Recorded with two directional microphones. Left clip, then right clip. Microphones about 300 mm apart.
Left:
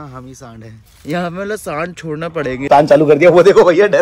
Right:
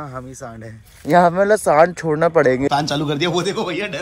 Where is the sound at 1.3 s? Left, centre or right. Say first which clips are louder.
Right 7 dB; centre.